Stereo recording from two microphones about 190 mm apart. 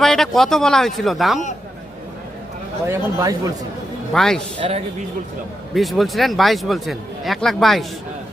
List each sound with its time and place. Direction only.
0.0 s speech: centre (ahead or behind)
2.8 s speech: 15° right (ahead or behind)
4.1 s speech: 5° left (ahead or behind)
5.7 s speech: centre (ahead or behind)